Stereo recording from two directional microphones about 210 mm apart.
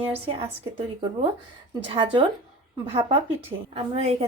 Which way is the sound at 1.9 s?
25° right (ahead or behind).